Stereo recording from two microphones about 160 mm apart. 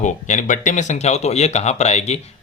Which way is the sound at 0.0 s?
50° left (ahead or behind).